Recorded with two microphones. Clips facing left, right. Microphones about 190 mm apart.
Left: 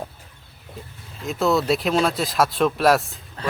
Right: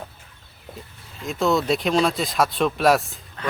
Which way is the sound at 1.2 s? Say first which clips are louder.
Left 1 dB; centre (ahead or behind).